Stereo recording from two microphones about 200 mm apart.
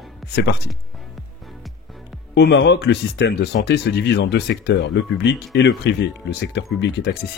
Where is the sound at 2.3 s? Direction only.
60° left (ahead or behind).